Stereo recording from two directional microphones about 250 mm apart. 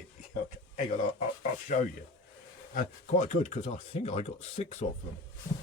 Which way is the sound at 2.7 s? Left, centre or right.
Left.